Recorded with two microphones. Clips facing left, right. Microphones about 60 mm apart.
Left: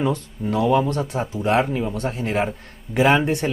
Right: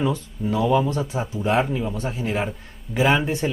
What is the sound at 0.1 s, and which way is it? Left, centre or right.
A man's voice, left.